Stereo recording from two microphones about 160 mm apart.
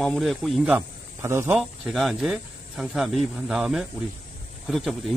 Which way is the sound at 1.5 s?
Centre (ahead or behind).